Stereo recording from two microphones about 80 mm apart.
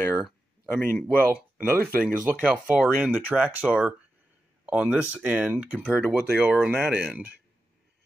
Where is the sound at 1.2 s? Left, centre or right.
Right.